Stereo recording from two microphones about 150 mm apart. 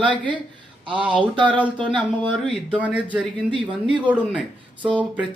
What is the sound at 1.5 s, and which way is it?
Speech, 10° left (ahead or behind).